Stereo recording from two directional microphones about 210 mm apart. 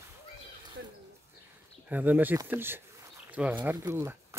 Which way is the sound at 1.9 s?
10° right (ahead or behind).